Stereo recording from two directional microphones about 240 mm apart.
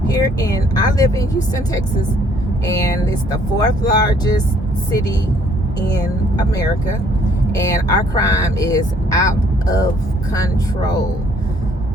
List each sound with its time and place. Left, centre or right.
0.1 s speech: centre
7.5 s speech: centre
10.3 s speech: centre